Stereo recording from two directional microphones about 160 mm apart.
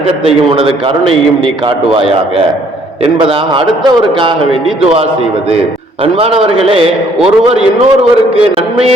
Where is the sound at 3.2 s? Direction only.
30° right (ahead or behind).